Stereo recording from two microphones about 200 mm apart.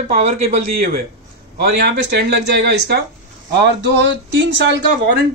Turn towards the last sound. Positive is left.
turn(degrees=-60)  # may be behind; listen again after turning